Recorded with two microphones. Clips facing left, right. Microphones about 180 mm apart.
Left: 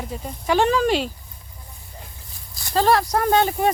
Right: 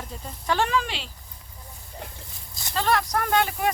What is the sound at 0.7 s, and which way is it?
Speech, 45° left (ahead or behind).